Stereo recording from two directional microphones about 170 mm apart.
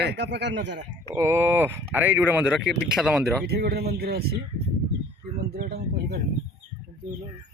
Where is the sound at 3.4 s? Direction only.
70° right (ahead or behind).